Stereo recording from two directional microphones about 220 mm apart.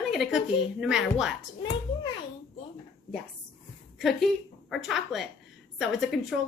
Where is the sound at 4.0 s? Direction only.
Centre (ahead or behind).